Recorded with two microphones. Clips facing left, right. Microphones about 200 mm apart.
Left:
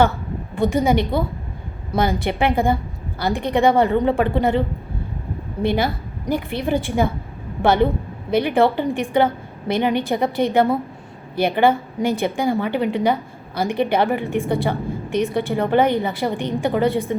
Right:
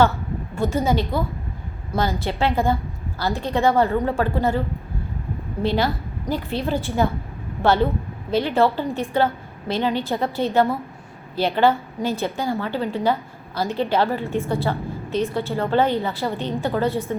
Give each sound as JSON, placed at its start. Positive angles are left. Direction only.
{"t": 0.5, "sound": "a woman's voice", "side_deg": 15}
{"t": 5.6, "sound": "a woman's voice", "side_deg": 15}